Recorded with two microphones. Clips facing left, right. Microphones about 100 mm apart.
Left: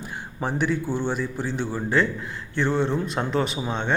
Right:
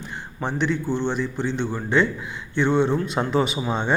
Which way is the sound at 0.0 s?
10° left (ahead or behind).